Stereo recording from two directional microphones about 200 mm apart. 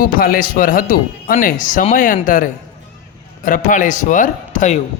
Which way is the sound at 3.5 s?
40° left (ahead or behind).